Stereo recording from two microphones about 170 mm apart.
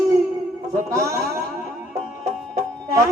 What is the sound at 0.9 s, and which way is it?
Music, 20° right (ahead or behind).